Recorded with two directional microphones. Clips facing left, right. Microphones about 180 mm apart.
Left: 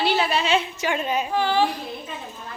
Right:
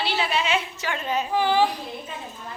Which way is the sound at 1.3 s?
10° right (ahead or behind).